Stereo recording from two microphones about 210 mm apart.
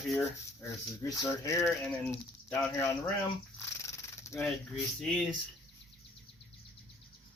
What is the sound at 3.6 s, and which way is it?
Wild animals, 15° left (ahead or behind).